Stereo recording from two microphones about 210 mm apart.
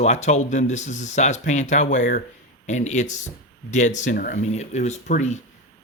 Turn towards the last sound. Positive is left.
turn(degrees=35)  # may be behind; listen again after turning